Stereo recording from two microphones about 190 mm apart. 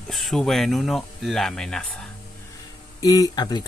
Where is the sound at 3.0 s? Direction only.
20° left (ahead or behind).